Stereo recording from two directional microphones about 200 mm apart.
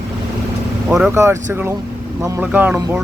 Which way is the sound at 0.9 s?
5° right (ahead or behind).